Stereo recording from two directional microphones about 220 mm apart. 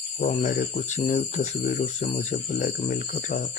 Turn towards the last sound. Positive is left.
turn(degrees=40)  # may be behind; listen again after turning